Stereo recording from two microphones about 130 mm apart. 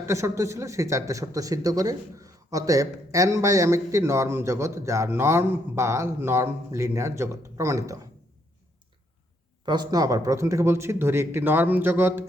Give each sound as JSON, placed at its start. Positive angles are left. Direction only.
{"t": 0.0, "sound": "speech", "side_deg": -20}
{"t": 9.6, "sound": "speech", "side_deg": -30}